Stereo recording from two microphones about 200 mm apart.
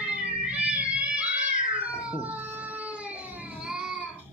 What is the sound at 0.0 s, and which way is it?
Cat, 5° right (ahead or behind).